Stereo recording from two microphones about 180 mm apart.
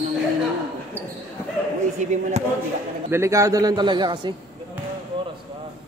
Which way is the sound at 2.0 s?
40° right (ahead or behind).